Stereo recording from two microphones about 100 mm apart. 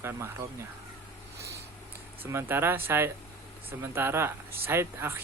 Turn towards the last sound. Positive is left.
turn(degrees=-25)  # may be behind; listen again after turning